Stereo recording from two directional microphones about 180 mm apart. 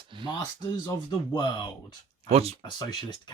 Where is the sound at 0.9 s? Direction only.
20° left (ahead or behind).